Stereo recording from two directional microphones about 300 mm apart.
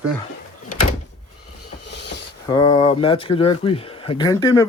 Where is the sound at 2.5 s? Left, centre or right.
Centre.